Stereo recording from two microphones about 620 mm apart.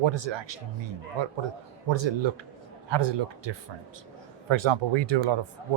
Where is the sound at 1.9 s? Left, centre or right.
Right.